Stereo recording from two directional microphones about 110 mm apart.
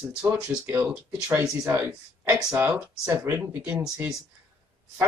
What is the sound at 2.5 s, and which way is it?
Speech, 15° right (ahead or behind).